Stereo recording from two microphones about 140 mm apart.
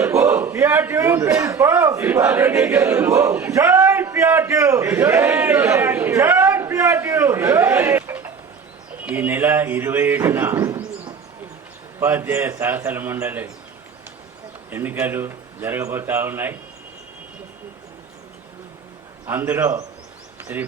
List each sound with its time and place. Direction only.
0.0 s a sound: 20° right (ahead or behind)
9.0 s speech: 10° right (ahead or behind)
11.9 s speech: 15° right (ahead or behind)
14.7 s speech: 15° right (ahead or behind)
19.2 s speech: 15° right (ahead or behind)